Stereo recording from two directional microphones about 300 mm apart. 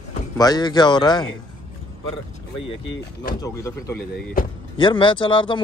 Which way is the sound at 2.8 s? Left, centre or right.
Left.